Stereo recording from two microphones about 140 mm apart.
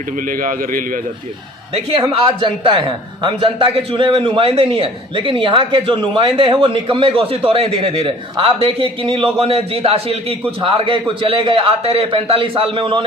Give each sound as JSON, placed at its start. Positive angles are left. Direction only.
{"t": 0.2, "sound": "a man's voice", "side_deg": -80}
{"t": 2.0, "sound": "a man's voice", "side_deg": -35}